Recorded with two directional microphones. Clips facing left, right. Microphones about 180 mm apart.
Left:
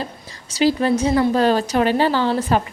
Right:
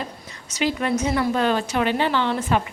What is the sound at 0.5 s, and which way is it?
A woman's voice, 30° left (ahead or behind).